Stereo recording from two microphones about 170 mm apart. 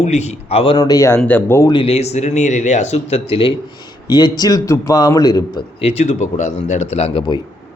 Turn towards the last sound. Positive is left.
turn(degrees=30)  # may be behind; listen again after turning